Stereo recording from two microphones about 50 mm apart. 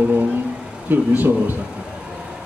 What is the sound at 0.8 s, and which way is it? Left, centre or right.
Speech, right.